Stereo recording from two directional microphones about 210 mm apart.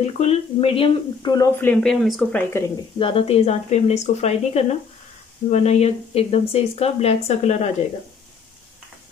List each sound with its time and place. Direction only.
0.0 s speech: 30° left (ahead or behind); by 2.4 s centre (ahead or behind)
3.0 s speech: 25° left (ahead or behind)